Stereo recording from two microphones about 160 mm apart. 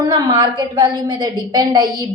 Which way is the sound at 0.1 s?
30° right (ahead or behind).